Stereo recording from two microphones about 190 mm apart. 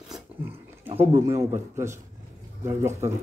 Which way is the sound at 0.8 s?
30° right (ahead or behind).